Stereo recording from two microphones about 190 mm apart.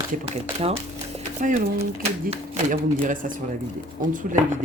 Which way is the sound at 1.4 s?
40° right (ahead or behind).